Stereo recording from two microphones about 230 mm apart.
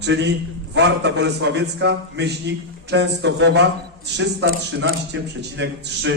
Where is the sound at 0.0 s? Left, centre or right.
Right.